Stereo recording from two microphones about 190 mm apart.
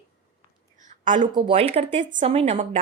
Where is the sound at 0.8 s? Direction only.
40° right (ahead or behind).